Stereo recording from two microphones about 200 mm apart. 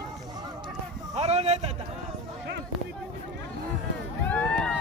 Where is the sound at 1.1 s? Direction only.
30° right (ahead or behind).